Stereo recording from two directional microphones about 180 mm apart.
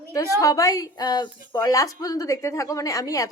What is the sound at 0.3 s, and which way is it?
A woman's voice, 20° left (ahead or behind).